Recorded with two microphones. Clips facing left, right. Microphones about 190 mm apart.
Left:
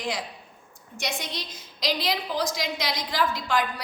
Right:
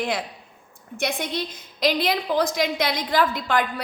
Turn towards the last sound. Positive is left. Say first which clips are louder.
# right 4 dB
turn(degrees=-55)  # may be behind; listen again after turning